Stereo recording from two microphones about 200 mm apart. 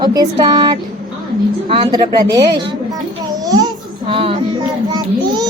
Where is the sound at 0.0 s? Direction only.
20° right (ahead or behind).